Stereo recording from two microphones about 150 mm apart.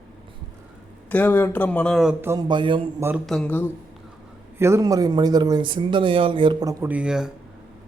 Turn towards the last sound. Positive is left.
turn(degrees=-5)  # may be behind; listen again after turning